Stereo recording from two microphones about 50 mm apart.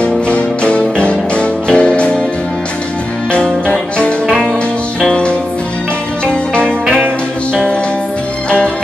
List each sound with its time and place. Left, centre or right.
0.0 s music: left
3.3 s music: centre
6.2 s music: centre